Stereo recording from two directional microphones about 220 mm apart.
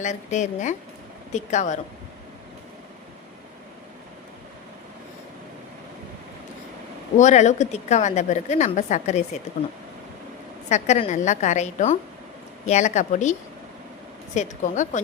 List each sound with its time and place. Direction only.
0.0 s a woman's voice: 30° left (ahead or behind)
7.2 s a woman's voice: 35° left (ahead or behind)
10.7 s a woman's voice: 30° left (ahead or behind)
14.3 s a woman's voice: 35° left (ahead or behind)